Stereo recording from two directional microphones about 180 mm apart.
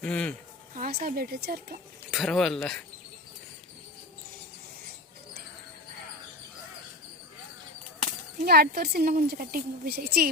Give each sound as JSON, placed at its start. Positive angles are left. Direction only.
{"t": 0.0, "sound": "speech", "side_deg": 5}
{"t": 0.8, "sound": "a woman's voice", "side_deg": -60}
{"t": 2.0, "sound": "speech", "side_deg": 0}
{"t": 8.4, "sound": "a woman's voice", "side_deg": -60}